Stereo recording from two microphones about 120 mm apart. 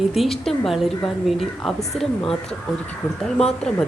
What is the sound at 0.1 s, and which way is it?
Speech, centre (ahead or behind).